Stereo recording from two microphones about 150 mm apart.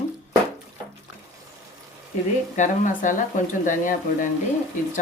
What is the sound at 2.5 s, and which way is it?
Speech, 55° left (ahead or behind).